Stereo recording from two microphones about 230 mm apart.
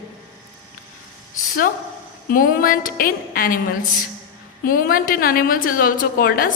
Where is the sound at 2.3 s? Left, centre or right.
Left.